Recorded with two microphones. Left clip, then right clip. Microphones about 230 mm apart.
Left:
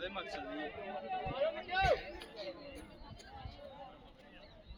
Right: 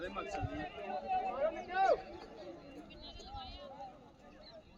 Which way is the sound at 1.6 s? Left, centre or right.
Centre.